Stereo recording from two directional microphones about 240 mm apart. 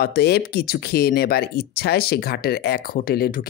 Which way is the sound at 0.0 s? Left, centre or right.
Left.